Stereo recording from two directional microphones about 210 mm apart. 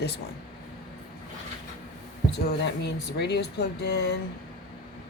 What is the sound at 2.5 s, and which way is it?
Speech, 55° left (ahead or behind).